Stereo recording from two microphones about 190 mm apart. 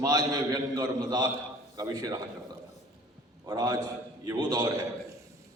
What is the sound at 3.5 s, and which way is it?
A man's voice, 20° right (ahead or behind).